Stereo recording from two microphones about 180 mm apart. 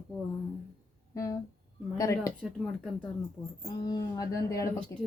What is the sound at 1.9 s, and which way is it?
Speech, 20° left (ahead or behind).